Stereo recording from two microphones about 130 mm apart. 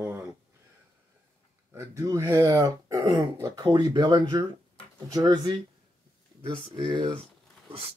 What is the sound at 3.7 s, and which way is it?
Speech, 35° right (ahead or behind).